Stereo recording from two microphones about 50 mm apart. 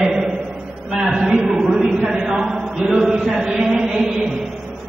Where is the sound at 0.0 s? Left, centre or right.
Centre.